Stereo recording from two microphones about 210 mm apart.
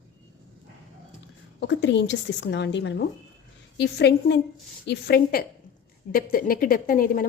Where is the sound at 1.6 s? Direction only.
60° left (ahead or behind); by 7.2 s 45° left (ahead or behind).